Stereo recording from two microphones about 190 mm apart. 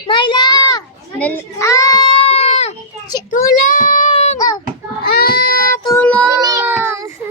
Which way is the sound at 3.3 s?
45° left (ahead or behind).